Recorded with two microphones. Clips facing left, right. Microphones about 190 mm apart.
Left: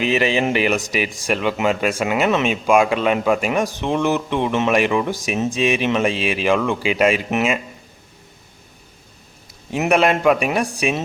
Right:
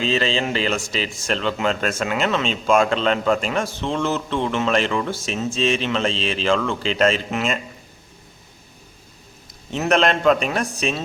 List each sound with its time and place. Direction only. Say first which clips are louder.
0.0 s speech: left 3 dB; 15° left (ahead or behind)
9.7 s speech: left 2 dB; 10° left (ahead or behind)